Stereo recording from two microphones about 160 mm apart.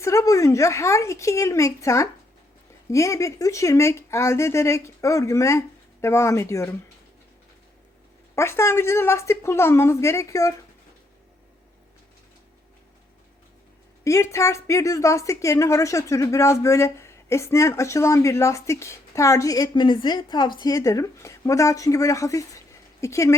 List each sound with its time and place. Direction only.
0.0 s a woman's voice: 20° left (ahead or behind)
8.4 s speech: 15° left (ahead or behind)
14.0 s a woman's voice: 15° left (ahead or behind)